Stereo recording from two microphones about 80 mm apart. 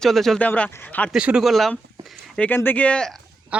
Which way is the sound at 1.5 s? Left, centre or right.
Centre.